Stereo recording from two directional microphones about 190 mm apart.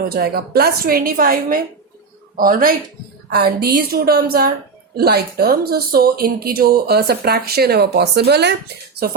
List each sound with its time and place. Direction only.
0.0 s a woman's voice: 55° right (ahead or behind)